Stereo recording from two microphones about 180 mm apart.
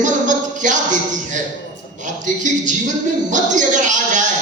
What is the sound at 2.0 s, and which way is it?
Speech, 45° right (ahead or behind).